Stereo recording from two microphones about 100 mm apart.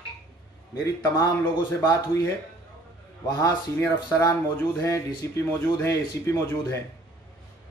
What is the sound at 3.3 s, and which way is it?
Speech, 35° left (ahead or behind).